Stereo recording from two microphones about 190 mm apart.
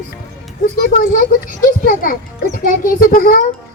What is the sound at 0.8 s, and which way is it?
Speech, 50° left (ahead or behind).